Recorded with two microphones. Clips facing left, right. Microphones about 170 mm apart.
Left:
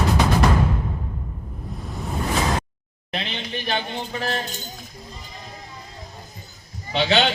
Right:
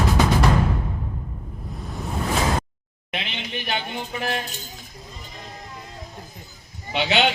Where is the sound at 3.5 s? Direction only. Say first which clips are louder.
Left 2 dB; 15° right (ahead or behind).